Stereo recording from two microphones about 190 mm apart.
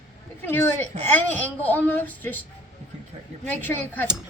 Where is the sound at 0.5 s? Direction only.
10° left (ahead or behind).